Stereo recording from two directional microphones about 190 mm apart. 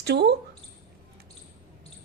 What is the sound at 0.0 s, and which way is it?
Speech, 60° right (ahead or behind).